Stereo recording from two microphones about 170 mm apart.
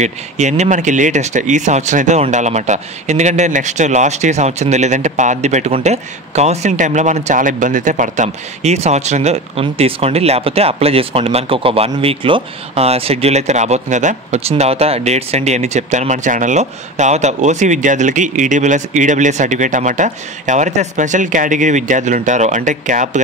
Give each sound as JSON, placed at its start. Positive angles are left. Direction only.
{"t": 0.0, "sound": "speech", "side_deg": -45}